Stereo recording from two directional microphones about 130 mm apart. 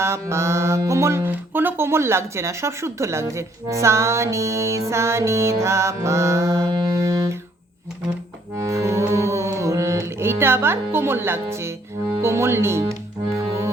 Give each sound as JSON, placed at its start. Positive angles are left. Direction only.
{"t": 0.0, "sound": "speech", "side_deg": -20}
{"t": 8.5, "sound": "music", "side_deg": -25}
{"t": 12.2, "sound": "speech", "side_deg": -20}